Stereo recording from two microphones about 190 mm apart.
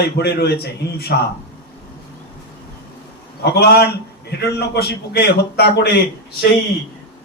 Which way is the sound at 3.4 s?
60° left (ahead or behind).